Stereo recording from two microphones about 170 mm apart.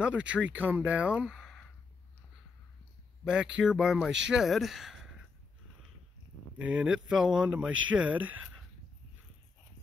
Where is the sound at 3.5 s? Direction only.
5° right (ahead or behind).